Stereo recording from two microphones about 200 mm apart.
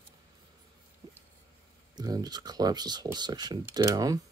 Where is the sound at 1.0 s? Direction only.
20° right (ahead or behind).